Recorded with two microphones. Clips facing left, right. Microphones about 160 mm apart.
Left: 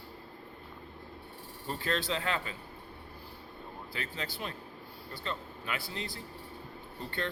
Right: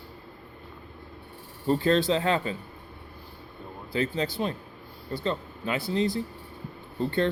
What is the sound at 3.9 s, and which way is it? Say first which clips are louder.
Speech: right 13 dB; 25° right (ahead or behind).